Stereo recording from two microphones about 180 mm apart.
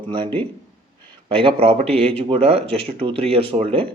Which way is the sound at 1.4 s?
30° right (ahead or behind).